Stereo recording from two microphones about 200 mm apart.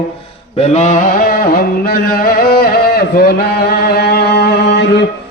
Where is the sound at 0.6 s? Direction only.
35° left (ahead or behind).